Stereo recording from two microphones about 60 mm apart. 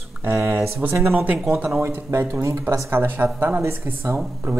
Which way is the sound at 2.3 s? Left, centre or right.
Right.